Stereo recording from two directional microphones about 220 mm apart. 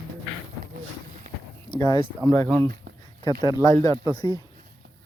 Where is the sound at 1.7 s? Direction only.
20° left (ahead or behind).